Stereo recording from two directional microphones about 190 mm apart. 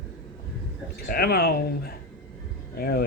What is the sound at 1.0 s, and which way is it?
Speech, 55° left (ahead or behind).